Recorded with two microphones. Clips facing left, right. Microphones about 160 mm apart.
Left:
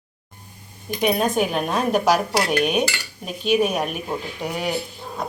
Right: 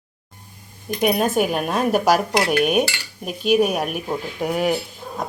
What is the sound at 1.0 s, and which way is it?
Speech, 5° right (ahead or behind).